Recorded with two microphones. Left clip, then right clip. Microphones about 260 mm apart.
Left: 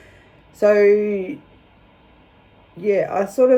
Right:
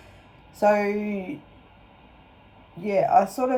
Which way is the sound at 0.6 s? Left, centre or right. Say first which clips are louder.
Left 8 dB; centre.